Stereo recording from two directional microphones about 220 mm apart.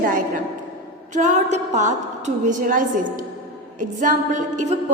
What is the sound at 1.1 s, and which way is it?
A woman's voice, 35° right (ahead or behind).